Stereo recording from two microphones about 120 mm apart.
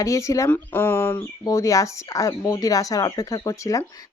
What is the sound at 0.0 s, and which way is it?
Speech, 25° left (ahead or behind).